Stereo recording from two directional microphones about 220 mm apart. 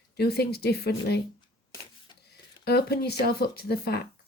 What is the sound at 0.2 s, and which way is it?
Speech, 45° left (ahead or behind).